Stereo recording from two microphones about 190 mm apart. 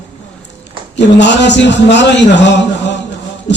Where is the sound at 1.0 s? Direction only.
65° left (ahead or behind).